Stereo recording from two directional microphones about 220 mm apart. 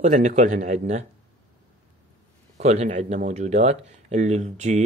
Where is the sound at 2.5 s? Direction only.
30° right (ahead or behind).